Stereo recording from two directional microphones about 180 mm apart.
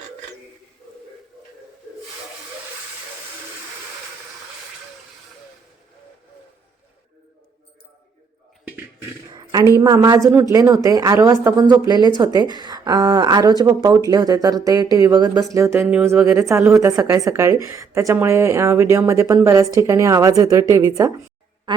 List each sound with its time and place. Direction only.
9.3 s a woman's voice: 20° right (ahead or behind)